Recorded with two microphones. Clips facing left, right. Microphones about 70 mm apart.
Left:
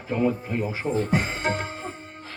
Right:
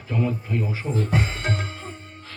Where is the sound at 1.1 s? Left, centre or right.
Centre.